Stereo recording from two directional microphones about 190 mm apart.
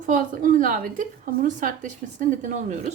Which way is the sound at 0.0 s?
45° right (ahead or behind).